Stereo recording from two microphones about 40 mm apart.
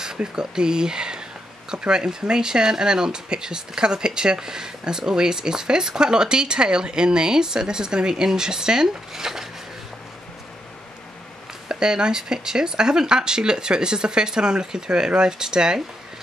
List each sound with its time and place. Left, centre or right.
0.0 s speech: centre
11.7 s speech: centre